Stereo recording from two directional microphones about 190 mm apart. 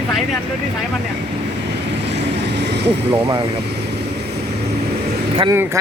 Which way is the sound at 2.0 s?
65° right (ahead or behind).